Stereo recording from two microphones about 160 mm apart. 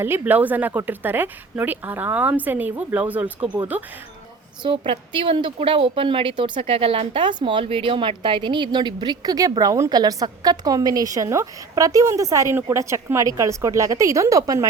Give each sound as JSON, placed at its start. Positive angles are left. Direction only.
{"t": 0.0, "sound": "speech", "side_deg": -10}
{"t": 4.8, "sound": "a woman's voice", "side_deg": -35}